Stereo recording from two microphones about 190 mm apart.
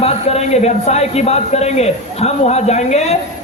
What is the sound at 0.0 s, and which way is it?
A man's voice, 35° left (ahead or behind).